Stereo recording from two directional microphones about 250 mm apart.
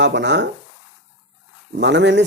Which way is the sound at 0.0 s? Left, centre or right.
Right.